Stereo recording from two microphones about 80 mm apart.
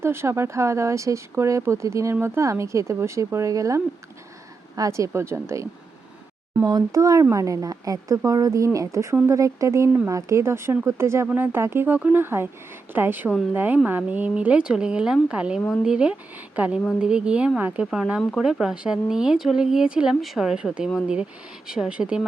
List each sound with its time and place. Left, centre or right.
0.0 s speech: right
6.7 s speech: right; by 17.8 s centre
18.6 s speech: centre